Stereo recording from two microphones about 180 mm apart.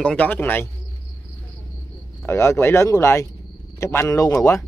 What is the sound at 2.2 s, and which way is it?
Speech, 15° left (ahead or behind).